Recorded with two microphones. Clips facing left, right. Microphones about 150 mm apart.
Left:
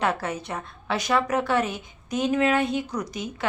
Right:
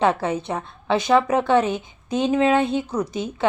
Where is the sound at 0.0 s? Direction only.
25° right (ahead or behind).